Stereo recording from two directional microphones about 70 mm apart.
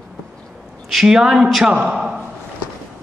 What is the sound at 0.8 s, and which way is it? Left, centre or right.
A man's voice, centre.